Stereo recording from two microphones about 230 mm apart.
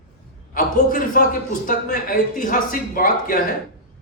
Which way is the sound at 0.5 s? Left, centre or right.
Left.